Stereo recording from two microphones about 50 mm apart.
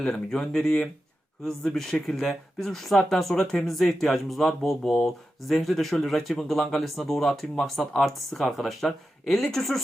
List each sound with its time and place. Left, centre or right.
0.0 s speech: centre
1.5 s speech: centre
3.3 s speech: centre